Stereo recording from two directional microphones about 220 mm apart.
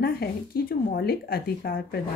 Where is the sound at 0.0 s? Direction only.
45° left (ahead or behind).